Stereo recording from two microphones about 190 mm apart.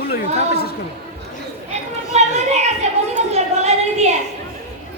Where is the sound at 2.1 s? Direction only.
35° right (ahead or behind).